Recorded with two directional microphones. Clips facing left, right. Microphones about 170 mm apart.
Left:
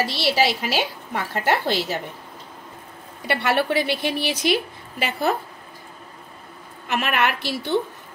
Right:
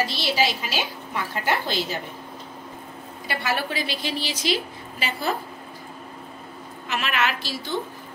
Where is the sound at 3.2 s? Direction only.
65° left (ahead or behind).